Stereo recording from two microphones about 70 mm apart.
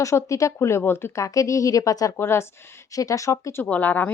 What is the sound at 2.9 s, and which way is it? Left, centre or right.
Speech, left.